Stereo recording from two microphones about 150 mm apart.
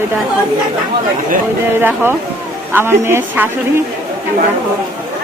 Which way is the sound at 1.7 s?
15° right (ahead or behind).